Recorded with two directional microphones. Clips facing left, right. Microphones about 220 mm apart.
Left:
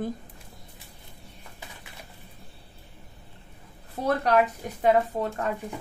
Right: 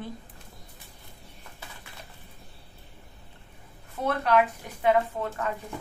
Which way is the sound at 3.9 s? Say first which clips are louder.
Left 1 dB; 35° left (ahead or behind).